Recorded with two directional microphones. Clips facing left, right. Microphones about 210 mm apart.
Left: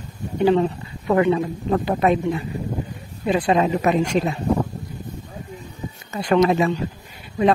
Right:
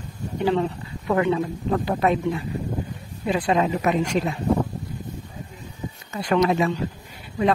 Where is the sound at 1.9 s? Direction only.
20° left (ahead or behind).